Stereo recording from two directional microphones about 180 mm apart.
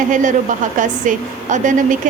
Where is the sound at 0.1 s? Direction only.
45° right (ahead or behind).